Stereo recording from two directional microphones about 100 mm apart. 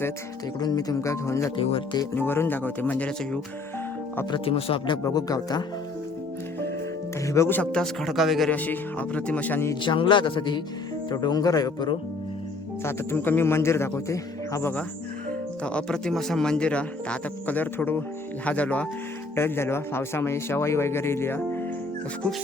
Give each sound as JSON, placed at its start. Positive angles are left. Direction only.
{"t": 0.6, "sound": "speech", "side_deg": 40}
{"t": 1.5, "sound": "speech", "side_deg": 60}
{"t": 2.1, "sound": "speech", "side_deg": 20}
{"t": 4.4, "sound": "speech", "side_deg": 70}
{"t": 5.0, "sound": "speech", "side_deg": 40}
{"t": 7.3, "sound": "speech", "side_deg": 25}
{"t": 7.6, "sound": "speech", "side_deg": 10}
{"t": 8.4, "sound": "speech", "side_deg": 15}
{"t": 9.8, "sound": "speech", "side_deg": 55}
{"t": 11.1, "sound": "speech", "side_deg": 40}
{"t": 12.8, "sound": "speech", "side_deg": 20}
{"t": 15.3, "sound": "speech", "side_deg": 10}
{"t": 19.4, "sound": "speech", "side_deg": 25}